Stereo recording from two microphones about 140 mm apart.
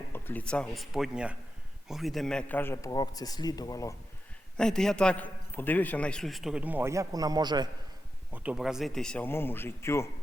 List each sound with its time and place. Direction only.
0.1 s a man's voice: 15° left (ahead or behind)
2.9 s speech: 30° left (ahead or behind)
4.5 s a man's voice: 5° left (ahead or behind); by 7.7 s 30° right (ahead or behind)
8.3 s a man's voice: 5° right (ahead or behind); by 10.1 s 20° left (ahead or behind)